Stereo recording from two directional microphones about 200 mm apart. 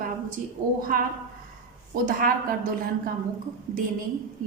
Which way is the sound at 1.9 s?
45° right (ahead or behind).